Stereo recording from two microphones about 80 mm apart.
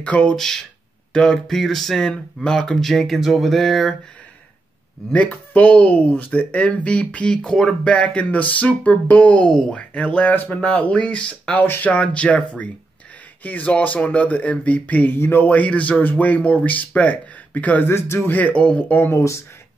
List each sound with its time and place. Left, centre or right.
0.0 s speech: centre
0.4 s speech: centre
5.1 s speech: centre; by 19.4 s left